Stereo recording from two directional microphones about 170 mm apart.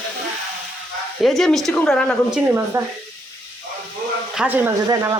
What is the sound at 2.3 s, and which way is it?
Speech, 15° right (ahead or behind).